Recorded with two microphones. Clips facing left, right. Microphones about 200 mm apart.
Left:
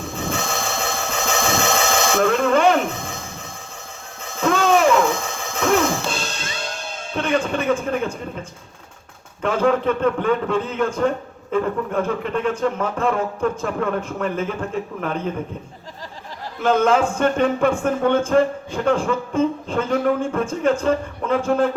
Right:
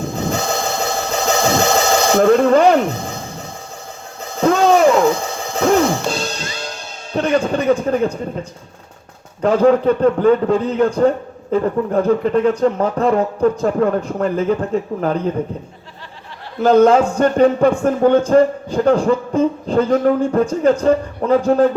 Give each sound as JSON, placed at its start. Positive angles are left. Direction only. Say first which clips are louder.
{"t": 0.0, "sound": "a sound", "louder": "right 5 dB", "side_deg": -40}
{"t": 4.2, "sound": "music", "louder": "right 5 dB", "side_deg": -35}
{"t": 7.1, "sound": "speech", "louder": "right 5 dB", "side_deg": -35}
{"t": 9.4, "sound": "speech", "louder": "right 6 dB", "side_deg": -35}
{"t": 16.6, "sound": "speech", "louder": "right 6 dB", "side_deg": -35}